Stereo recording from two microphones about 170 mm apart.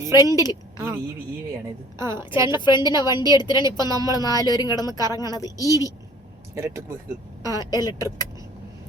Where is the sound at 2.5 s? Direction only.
25° left (ahead or behind).